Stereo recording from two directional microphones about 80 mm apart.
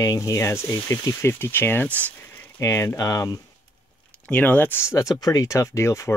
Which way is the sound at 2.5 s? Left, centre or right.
Left.